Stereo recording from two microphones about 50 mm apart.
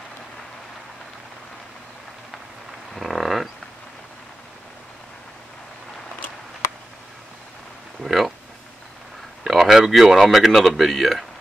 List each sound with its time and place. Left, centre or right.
2.9 s a sound: centre
8.0 s speech: centre
9.4 s speech: centre